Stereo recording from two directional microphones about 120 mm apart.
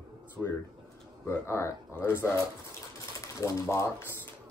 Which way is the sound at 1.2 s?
20° left (ahead or behind).